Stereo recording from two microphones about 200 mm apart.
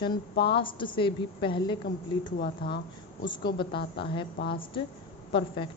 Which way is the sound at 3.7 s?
55° left (ahead or behind).